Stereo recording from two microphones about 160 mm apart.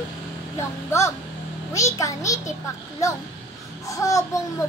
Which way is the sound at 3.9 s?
20° left (ahead or behind).